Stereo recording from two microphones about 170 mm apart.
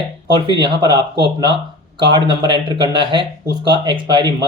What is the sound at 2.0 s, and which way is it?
Speech, 25° right (ahead or behind).